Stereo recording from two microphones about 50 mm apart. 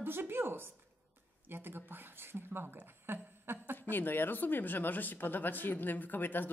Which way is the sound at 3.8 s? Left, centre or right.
Left.